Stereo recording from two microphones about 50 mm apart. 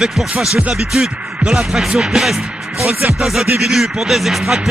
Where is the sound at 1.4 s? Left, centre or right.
Centre.